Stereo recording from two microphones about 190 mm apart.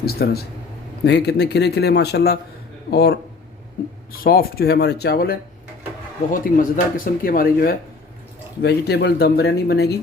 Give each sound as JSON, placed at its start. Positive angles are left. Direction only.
{"t": 0.0, "sound": "speech", "side_deg": 55}
{"t": 4.2, "sound": "speech", "side_deg": 50}
{"t": 6.3, "sound": "speech", "side_deg": 45}
{"t": 8.6, "sound": "speech", "side_deg": 60}